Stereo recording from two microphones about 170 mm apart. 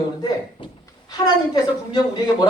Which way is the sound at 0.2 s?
25° left (ahead or behind).